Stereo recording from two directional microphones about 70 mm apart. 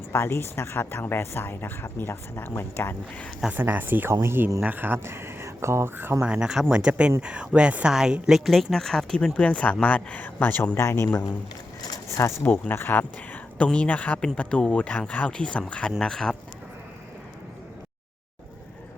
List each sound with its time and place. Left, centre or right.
0.1 s speech: left
3.5 s speech: right
6.2 s speech: centre; by 10.8 s left
10.8 s speech: left
12.1 s speech: left; by 16.4 s centre